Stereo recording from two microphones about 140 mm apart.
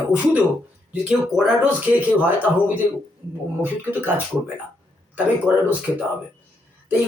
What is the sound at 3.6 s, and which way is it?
Speech, 15° right (ahead or behind).